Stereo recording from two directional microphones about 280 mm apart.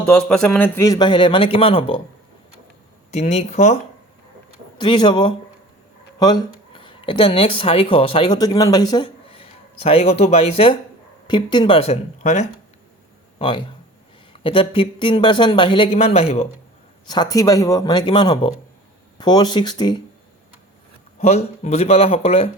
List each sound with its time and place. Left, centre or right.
0.0 s a man's voice: centre
3.1 s speech: left
4.8 s a man's voice: centre
21.2 s speech: left